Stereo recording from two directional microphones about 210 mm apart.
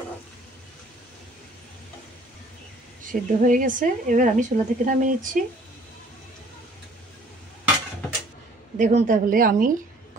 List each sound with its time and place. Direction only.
3.1 s a woman's voice: 40° right (ahead or behind)
8.7 s a woman's voice: 35° right (ahead or behind)